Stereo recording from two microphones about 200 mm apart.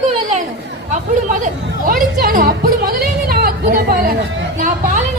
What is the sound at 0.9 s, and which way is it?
Music, 40° right (ahead or behind).